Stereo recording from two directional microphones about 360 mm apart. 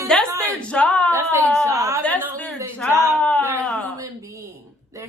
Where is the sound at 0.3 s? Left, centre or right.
Centre.